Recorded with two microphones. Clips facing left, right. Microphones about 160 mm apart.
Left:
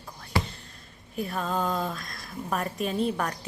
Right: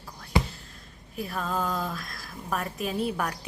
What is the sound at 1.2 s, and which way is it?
A woman's voice, centre (ahead or behind).